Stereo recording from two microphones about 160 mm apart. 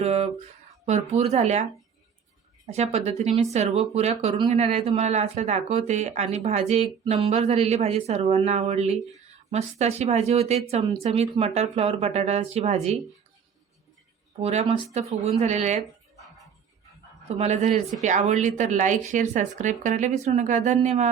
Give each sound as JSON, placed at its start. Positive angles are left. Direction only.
{"t": 0.0, "sound": "a sound", "side_deg": -40}
{"t": 0.9, "sound": "speech", "side_deg": -45}
{"t": 2.6, "sound": "speech", "side_deg": -45}
{"t": 14.4, "sound": "speech", "side_deg": -40}
{"t": 17.2, "sound": "speech", "side_deg": -45}